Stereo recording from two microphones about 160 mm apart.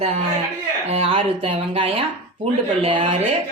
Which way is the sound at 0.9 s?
35° right (ahead or behind).